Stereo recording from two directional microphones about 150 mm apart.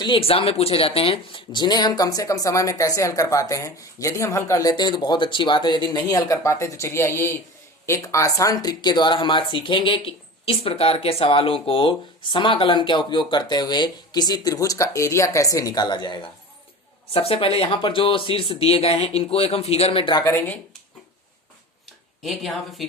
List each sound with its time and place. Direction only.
0.0 s speech: 35° left (ahead or behind)
17.1 s speech: 40° left (ahead or behind)
20.2 s speech: 15° left (ahead or behind)
22.2 s speech: centre (ahead or behind)